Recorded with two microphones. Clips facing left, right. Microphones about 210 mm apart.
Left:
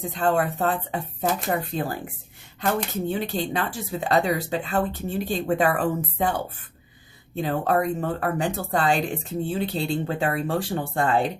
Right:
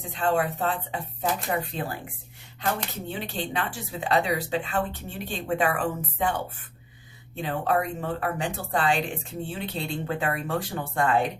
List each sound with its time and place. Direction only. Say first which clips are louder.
0.1 s speech: left 1 dB; 45° left (ahead or behind)
3.1 s speech: left 3 dB; 40° left (ahead or behind)